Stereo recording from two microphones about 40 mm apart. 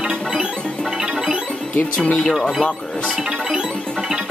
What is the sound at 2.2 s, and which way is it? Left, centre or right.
Speech, centre.